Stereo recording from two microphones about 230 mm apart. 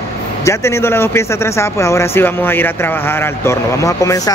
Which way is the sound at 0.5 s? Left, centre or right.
Centre.